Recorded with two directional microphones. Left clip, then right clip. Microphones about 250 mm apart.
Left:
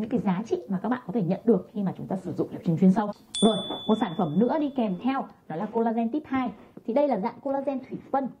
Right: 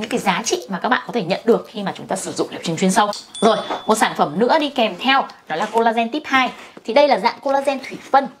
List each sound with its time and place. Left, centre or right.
0.0 s a woman's voice: centre
3.3 s speech: centre
7.4 s speech: right